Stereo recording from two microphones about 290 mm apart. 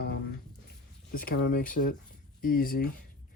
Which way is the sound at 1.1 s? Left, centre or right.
Left.